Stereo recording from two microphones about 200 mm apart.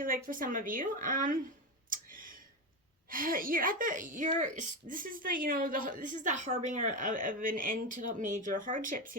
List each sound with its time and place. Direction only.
0.0 s speech: 45° right (ahead or behind)
1.9 s a sound: 45° right (ahead or behind)
3.1 s speech: 45° right (ahead or behind)